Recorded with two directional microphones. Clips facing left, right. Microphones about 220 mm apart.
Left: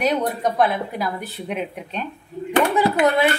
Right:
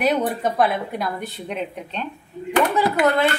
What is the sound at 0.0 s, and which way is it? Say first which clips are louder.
Speech: even; 5° right (ahead or behind).